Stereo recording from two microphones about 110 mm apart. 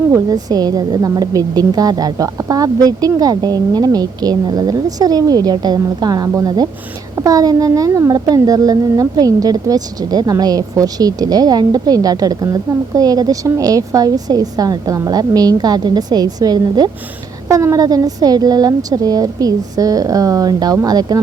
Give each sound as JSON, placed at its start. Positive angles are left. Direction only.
{"t": 0.1, "sound": "a woman's voice", "side_deg": -35}